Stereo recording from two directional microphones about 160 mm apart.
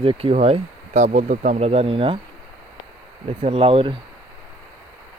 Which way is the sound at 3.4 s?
35° right (ahead or behind).